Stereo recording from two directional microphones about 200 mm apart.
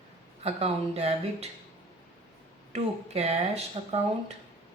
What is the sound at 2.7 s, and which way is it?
Speech, 30° right (ahead or behind).